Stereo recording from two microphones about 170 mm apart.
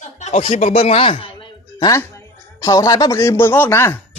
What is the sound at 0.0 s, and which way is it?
A man's voice, 40° left (ahead or behind).